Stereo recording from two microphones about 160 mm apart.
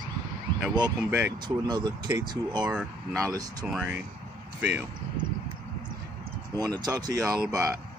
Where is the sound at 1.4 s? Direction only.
25° right (ahead or behind).